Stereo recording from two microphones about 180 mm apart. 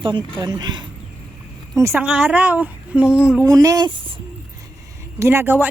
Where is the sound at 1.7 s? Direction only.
15° right (ahead or behind).